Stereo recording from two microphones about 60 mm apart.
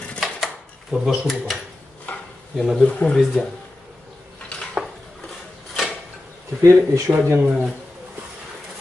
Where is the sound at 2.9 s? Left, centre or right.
Centre.